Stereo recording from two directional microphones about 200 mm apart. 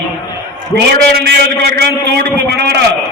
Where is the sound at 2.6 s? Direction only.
55° right (ahead or behind).